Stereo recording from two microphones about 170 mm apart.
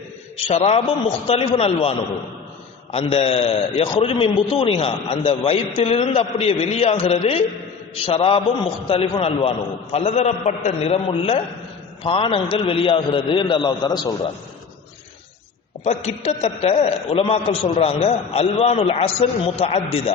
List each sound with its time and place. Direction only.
0.4 s a man's voice: 35° left (ahead or behind)
15.8 s a man's voice: 40° left (ahead or behind)